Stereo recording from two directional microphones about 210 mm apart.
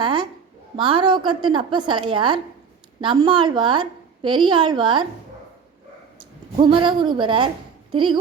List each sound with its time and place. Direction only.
0.0 s a woman's voice: 20° right (ahead or behind)
6.1 s a woman's voice: 20° right (ahead or behind)